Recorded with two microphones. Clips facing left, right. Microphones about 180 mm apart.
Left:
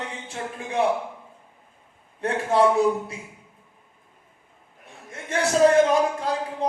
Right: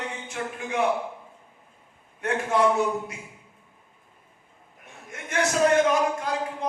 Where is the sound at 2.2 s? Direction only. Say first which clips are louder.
Left 3 dB; 30° left (ahead or behind).